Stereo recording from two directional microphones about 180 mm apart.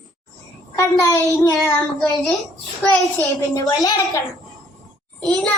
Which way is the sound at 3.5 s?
20° left (ahead or behind).